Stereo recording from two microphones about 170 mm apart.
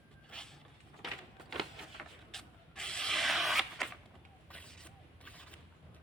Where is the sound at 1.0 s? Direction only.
Centre (ahead or behind).